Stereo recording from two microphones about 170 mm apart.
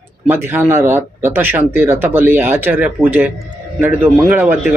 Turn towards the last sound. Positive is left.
turn(degrees=-10)  # may be behind; listen again after turning